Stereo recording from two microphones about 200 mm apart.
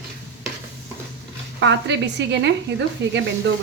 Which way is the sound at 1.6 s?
60° right (ahead or behind).